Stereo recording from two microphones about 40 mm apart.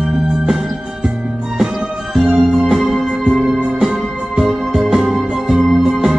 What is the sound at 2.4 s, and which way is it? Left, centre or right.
Music, centre.